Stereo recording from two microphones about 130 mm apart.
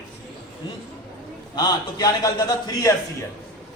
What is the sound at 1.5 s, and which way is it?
A man's voice, 30° left (ahead or behind).